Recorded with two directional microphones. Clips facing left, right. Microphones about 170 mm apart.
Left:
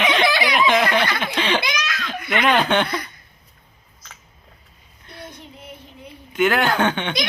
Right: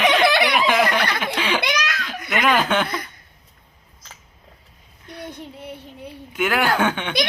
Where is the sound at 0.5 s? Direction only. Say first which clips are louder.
Left 1 dB; 5° right (ahead or behind).